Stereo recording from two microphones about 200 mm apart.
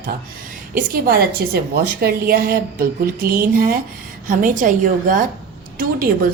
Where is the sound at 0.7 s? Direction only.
45° right (ahead or behind).